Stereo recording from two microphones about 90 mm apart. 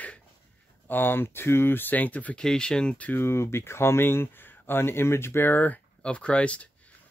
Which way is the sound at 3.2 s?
30° left (ahead or behind).